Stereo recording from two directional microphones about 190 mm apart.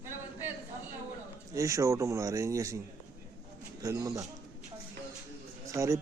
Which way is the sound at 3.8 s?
15° right (ahead or behind).